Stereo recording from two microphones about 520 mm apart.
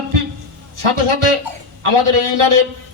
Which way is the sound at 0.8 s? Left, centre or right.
Right.